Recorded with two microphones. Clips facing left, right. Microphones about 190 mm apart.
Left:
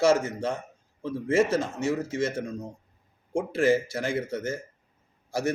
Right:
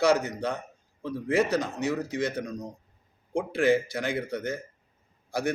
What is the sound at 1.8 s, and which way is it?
Speech, 25° left (ahead or behind).